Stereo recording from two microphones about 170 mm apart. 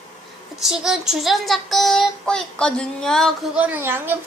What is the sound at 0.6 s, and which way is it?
Speech, 5° right (ahead or behind).